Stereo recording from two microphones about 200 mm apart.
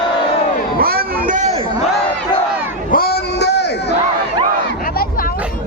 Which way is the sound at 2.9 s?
50° left (ahead or behind).